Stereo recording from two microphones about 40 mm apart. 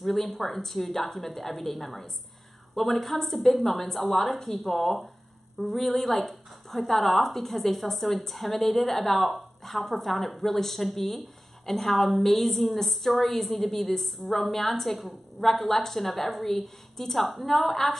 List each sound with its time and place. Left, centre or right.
0.0 s speech: centre